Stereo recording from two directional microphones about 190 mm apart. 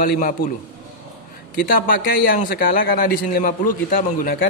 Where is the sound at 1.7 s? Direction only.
45° left (ahead or behind).